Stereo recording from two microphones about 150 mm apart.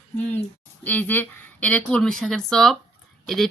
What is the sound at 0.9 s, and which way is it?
A woman's voice, 10° left (ahead or behind).